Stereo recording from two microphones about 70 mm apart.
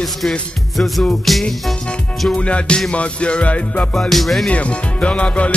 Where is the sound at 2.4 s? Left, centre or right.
Centre.